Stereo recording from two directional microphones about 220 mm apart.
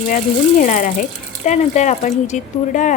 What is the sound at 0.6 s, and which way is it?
A woman's voice, 35° left (ahead or behind).